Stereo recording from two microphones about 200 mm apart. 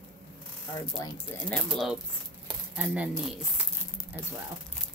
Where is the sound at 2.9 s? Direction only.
5° right (ahead or behind).